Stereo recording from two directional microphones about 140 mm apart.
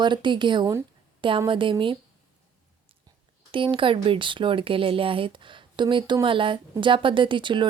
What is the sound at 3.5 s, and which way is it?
A woman's voice, 35° right (ahead or behind).